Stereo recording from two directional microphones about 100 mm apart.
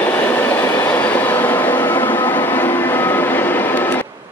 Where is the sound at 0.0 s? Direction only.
15° left (ahead or behind).